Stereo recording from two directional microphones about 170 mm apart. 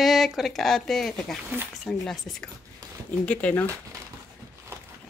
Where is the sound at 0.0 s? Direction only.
Centre (ahead or behind).